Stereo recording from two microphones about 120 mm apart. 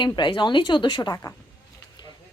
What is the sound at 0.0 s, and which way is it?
Speech, 40° left (ahead or behind).